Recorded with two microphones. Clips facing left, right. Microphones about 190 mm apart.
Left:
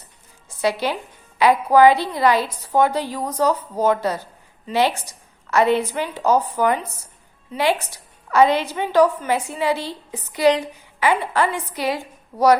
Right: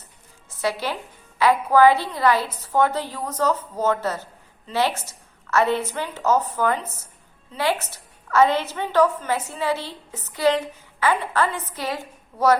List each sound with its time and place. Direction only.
0.6 s a woman's voice: 15° left (ahead or behind)